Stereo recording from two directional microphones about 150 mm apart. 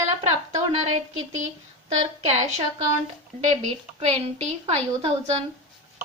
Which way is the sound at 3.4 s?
45° right (ahead or behind).